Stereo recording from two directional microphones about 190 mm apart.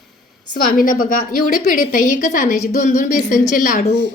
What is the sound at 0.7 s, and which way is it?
A woman's voice, 45° left (ahead or behind).